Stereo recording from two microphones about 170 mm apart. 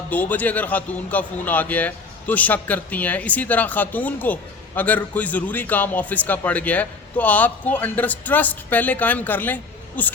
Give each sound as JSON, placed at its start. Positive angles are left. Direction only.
{"t": 0.1, "sound": "a man's voice", "side_deg": 10}